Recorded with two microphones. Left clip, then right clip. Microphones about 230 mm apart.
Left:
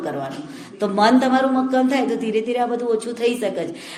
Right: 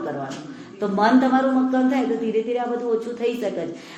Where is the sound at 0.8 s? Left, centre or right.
Left.